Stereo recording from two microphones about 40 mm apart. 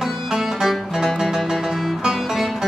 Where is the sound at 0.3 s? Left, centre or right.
Centre.